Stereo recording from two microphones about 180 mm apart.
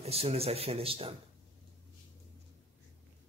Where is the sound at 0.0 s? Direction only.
35° right (ahead or behind).